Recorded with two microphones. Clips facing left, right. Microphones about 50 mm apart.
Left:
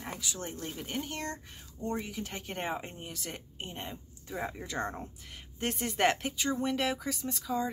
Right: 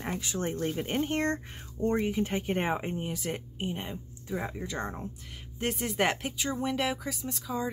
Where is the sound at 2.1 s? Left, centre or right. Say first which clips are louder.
Right 10 dB; right.